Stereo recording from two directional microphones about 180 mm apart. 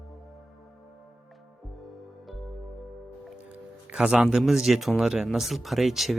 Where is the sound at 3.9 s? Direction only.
5° right (ahead or behind).